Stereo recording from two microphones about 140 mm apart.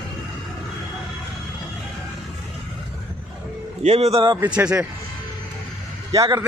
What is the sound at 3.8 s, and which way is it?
Speech, 50° right (ahead or behind).